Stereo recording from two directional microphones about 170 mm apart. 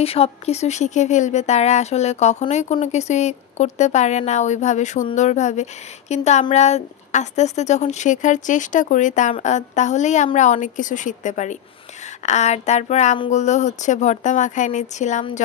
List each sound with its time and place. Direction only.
0.0 s a woman's voice: 35° left (ahead or behind)